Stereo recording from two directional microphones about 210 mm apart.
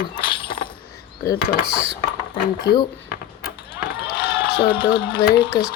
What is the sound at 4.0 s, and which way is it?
Run, 50° left (ahead or behind).